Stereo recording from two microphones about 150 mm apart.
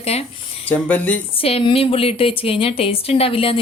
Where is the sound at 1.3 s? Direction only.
40° left (ahead or behind).